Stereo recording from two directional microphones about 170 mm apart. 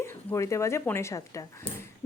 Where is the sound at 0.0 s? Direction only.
15° left (ahead or behind).